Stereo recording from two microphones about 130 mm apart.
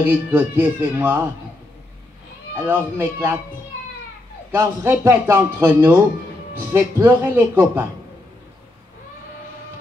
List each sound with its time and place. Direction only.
0.0 s a man's voice: 15° right (ahead or behind)
2.5 s a man's voice: 15° right (ahead or behind)
4.5 s a man's voice: 20° right (ahead or behind)